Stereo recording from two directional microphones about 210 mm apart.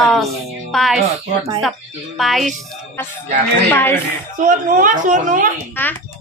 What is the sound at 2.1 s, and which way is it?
Speech, centre (ahead or behind).